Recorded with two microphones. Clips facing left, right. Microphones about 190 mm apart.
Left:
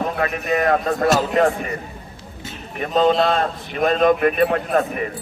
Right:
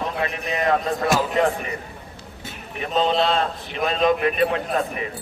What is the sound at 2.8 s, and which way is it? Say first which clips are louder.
A man's voice: left 4 dB; 45° left (ahead or behind).